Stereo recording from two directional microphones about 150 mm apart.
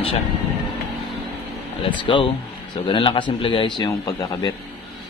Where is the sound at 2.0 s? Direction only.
35° left (ahead or behind).